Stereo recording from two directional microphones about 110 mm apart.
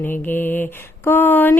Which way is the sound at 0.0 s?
20° left (ahead or behind).